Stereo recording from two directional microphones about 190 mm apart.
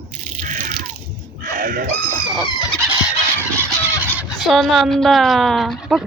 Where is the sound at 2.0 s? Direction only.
25° left (ahead or behind).